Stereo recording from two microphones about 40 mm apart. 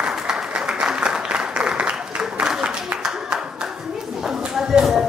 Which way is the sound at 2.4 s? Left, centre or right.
Centre.